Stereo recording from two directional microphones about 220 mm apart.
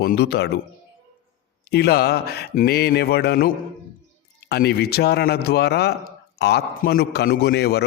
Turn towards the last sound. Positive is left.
turn(degrees=50)  # may be behind; listen again after turning